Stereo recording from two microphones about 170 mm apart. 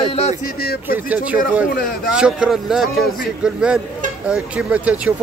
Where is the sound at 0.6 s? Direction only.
65° left (ahead or behind).